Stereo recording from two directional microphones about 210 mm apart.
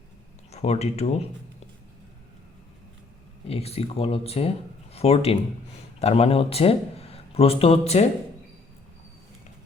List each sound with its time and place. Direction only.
0.5 s speech: 30° left (ahead or behind)
3.4 s speech: 30° left (ahead or behind)